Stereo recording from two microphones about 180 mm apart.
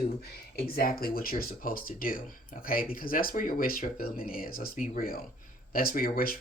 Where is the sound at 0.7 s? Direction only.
55° left (ahead or behind).